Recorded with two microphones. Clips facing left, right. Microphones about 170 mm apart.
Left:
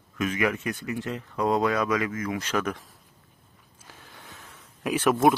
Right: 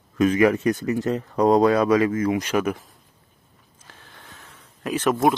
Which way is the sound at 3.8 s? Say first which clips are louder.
Even; 10° left (ahead or behind).